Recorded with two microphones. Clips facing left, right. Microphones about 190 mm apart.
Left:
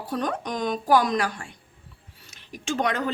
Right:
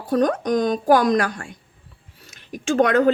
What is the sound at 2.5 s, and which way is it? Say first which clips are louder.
Speech: right 9 dB; 50° right (ahead or behind).